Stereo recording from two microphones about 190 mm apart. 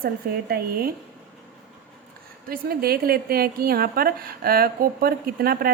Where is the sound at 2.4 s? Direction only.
50° right (ahead or behind).